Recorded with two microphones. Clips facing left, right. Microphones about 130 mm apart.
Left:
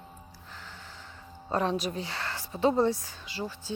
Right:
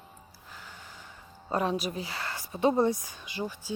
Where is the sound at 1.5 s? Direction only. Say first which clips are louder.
Even; 10° right (ahead or behind).